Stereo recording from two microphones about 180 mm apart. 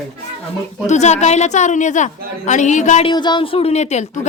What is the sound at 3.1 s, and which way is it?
A woman's voice, 25° left (ahead or behind).